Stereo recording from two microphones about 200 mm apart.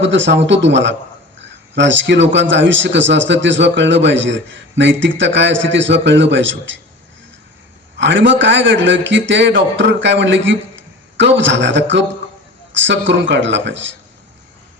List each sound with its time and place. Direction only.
0.0 s a man's voice: 65° right (ahead or behind)
1.4 s a sound: 60° right (ahead or behind)
2.3 s a man's voice: 65° right (ahead or behind)
7.9 s a man's voice: 65° right (ahead or behind)